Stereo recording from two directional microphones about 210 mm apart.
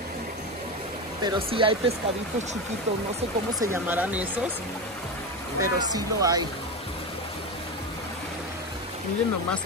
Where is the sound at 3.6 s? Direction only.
10° right (ahead or behind).